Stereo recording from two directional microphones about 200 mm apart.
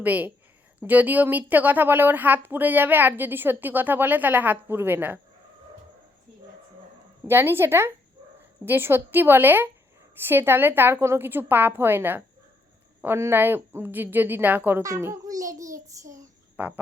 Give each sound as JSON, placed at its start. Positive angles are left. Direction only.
{"t": 0.0, "sound": "a woman's voice", "side_deg": -10}
{"t": 7.3, "sound": "a woman's voice", "side_deg": -10}
{"t": 16.6, "sound": "frog", "side_deg": -10}